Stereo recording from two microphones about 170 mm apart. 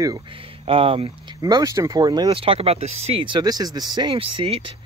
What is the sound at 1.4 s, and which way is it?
Speech, 20° right (ahead or behind).